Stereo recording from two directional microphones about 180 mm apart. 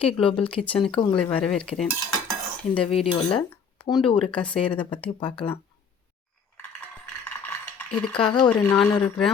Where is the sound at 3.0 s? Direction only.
35° left (ahead or behind).